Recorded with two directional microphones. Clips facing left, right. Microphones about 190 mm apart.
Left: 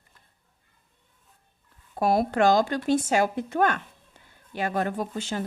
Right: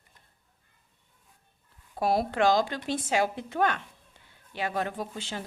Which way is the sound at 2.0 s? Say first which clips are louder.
Left 3 dB; 50° left (ahead or behind).